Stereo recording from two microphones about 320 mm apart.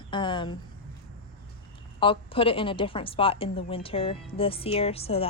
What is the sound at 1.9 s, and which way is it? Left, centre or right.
A woman's voice, centre.